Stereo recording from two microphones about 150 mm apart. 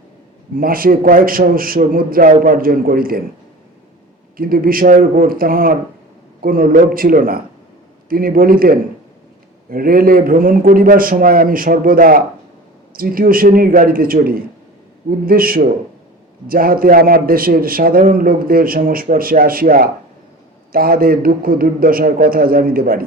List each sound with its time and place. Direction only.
0.6 s a man's voice: 75° right (ahead or behind)
4.4 s a man's voice: 75° right (ahead or behind)